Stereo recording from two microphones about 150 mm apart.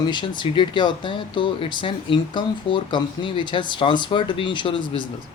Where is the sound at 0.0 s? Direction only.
30° left (ahead or behind).